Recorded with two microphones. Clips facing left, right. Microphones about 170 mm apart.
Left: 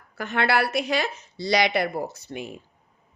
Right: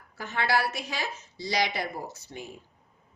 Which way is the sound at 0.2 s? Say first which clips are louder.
Left 4 dB; 65° left (ahead or behind).